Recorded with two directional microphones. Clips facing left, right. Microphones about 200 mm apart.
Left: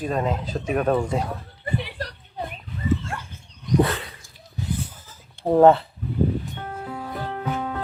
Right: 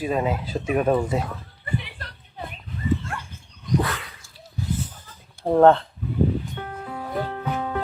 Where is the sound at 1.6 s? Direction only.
40° left (ahead or behind).